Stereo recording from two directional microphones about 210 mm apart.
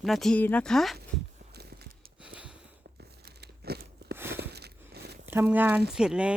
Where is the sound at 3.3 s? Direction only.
50° right (ahead or behind).